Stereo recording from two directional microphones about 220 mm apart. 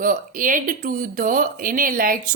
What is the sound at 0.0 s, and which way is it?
A woman's voice, 40° right (ahead or behind).